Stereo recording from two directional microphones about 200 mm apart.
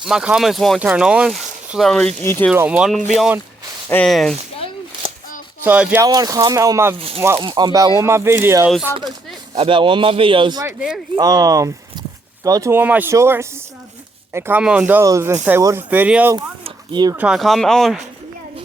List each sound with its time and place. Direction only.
0.0 s speech: 5° right (ahead or behind)
2.5 s speech: 5° right (ahead or behind)
3.8 s speech: 5° left (ahead or behind)
5.6 s speech: 5° right (ahead or behind)
6.1 s speech: 20° right (ahead or behind)
9.6 s a man's voice: 25° right (ahead or behind)
10.8 s speech: 5° right (ahead or behind)
11.1 s speech: 20° right (ahead or behind)
16.6 s a sound: 20° right (ahead or behind)
17.2 s speech: 5° right (ahead or behind)